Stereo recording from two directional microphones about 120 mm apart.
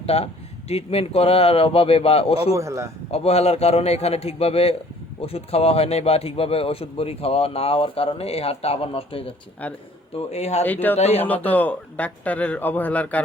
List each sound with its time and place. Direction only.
0.0 s a man's voice: 55° left (ahead or behind)
2.5 s speech: 25° right (ahead or behind)
3.1 s a man's voice: 60° left (ahead or behind)
10.2 s a man's voice: 60° left (ahead or behind)
10.7 s speech: 15° left (ahead or behind)
10.9 s a man's voice: 60° left (ahead or behind)
11.2 s speech: 15° left (ahead or behind)